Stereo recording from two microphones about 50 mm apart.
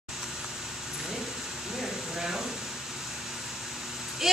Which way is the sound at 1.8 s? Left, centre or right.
Centre.